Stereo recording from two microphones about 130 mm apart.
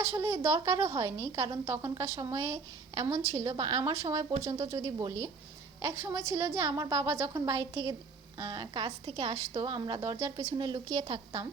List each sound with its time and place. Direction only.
0.0 s a woman's voice: 25° right (ahead or behind)
10.0 s a woman's voice: 20° right (ahead or behind)